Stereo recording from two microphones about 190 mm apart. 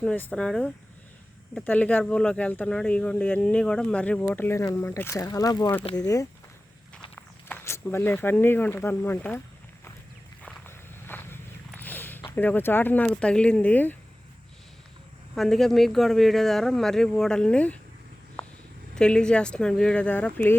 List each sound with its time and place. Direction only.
0.0 s speech: 5° left (ahead or behind)
10.4 s walk: 10° left (ahead or behind)
15.4 s speech: centre (ahead or behind)
18.9 s speech: 5° left (ahead or behind)